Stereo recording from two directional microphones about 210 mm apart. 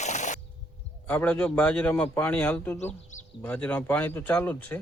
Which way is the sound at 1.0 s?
5° left (ahead or behind).